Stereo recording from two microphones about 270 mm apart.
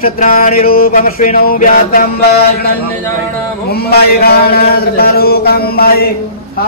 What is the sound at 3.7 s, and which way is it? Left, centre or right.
A man's voice, left.